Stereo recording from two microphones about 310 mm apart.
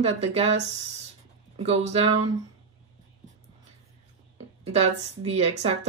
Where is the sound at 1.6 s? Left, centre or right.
Centre.